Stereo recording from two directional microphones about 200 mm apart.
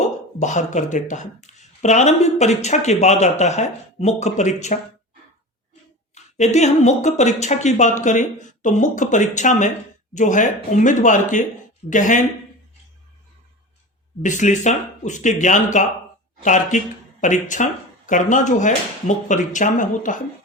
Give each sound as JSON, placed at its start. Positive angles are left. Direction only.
{"t": 0.3, "sound": "speech", "side_deg": 35}
{"t": 6.1, "sound": "speech", "side_deg": 35}
{"t": 14.2, "sound": "speech", "side_deg": 40}